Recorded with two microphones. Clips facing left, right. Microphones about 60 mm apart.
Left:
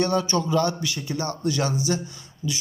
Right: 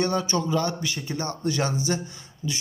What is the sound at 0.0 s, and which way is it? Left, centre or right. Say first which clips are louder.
A man's voice: left 2 dB; centre.